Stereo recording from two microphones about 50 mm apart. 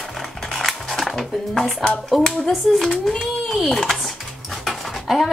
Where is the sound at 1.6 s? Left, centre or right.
Left.